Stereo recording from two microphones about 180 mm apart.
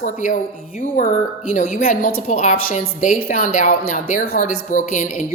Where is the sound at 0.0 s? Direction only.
40° left (ahead or behind).